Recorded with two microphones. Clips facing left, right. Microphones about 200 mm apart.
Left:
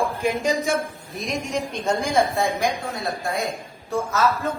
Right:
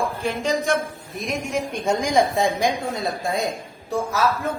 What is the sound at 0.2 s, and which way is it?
Speech, 15° left (ahead or behind).